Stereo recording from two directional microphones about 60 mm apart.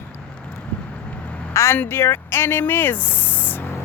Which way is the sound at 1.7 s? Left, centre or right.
Left.